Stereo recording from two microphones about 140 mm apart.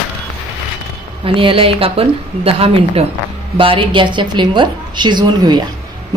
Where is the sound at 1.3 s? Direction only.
40° right (ahead or behind).